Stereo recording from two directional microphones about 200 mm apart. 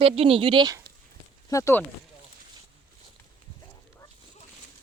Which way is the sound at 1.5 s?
10° left (ahead or behind).